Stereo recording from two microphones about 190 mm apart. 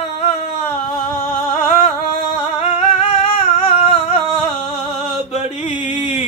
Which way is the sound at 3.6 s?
30° left (ahead or behind).